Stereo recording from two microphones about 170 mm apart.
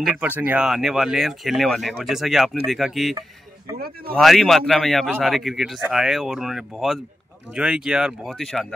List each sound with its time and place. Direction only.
0.0 s speech: 5° right (ahead or behind)
3.7 s speech: 65° right (ahead or behind)
4.1 s speech: centre (ahead or behind)